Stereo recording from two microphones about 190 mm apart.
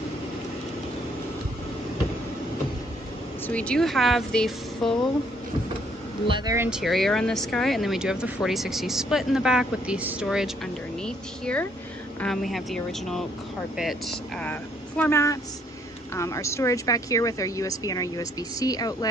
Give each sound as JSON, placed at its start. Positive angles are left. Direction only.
{"t": 3.4, "sound": "speech", "side_deg": 5}
{"t": 6.2, "sound": "speech", "side_deg": -25}
{"t": 6.5, "sound": "speech", "side_deg": -10}
{"t": 6.8, "sound": "speech", "side_deg": 0}